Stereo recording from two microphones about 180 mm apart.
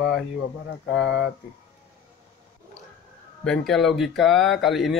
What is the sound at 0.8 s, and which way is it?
Speech, 75° left (ahead or behind).